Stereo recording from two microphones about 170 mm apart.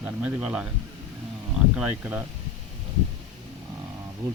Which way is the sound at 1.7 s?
10° right (ahead or behind).